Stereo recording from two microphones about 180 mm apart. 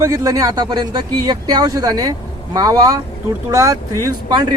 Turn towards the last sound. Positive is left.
turn(degrees=-20)  # may be behind; listen again after turning